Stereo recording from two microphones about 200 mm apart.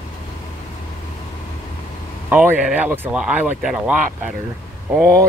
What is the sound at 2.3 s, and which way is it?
Speech, 10° right (ahead or behind).